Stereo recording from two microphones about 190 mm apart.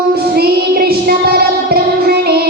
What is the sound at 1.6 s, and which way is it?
Music, 55° right (ahead or behind).